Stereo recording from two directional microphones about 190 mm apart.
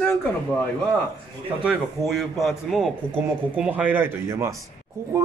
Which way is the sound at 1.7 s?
Centre (ahead or behind).